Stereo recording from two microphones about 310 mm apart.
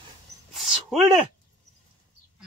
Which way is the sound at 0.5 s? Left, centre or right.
Centre.